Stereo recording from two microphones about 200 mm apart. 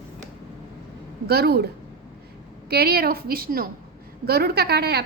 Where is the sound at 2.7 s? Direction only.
50° right (ahead or behind).